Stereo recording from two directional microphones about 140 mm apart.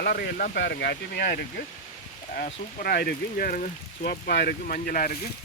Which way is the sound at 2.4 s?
90° left.